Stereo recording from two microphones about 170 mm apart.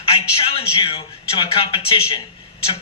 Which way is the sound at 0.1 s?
35° left (ahead or behind).